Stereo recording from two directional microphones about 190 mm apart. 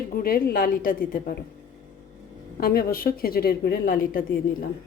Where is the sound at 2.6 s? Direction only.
55° left (ahead or behind).